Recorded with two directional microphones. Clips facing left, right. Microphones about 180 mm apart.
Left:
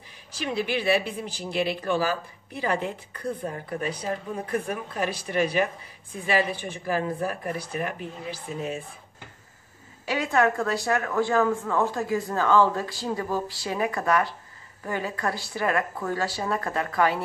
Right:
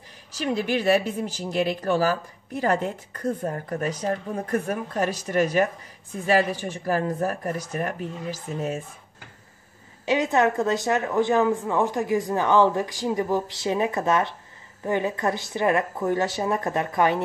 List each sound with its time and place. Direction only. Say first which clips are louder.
0.6 s speech: right 2 dB; 45° right (ahead or behind)
10.0 s speech: right 2 dB; 20° right (ahead or behind)